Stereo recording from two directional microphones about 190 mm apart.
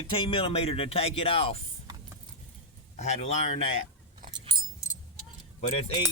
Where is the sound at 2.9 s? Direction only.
35° left (ahead or behind).